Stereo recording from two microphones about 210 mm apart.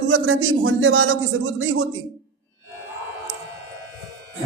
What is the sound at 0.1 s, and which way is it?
A man's voice, 70° right (ahead or behind).